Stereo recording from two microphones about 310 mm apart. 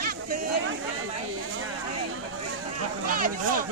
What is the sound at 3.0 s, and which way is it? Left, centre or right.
Speech, right.